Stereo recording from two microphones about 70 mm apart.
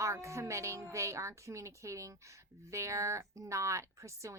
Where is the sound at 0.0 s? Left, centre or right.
Right.